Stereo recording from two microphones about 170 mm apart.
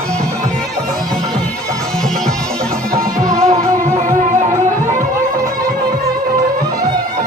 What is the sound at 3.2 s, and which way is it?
Music, 20° right (ahead or behind).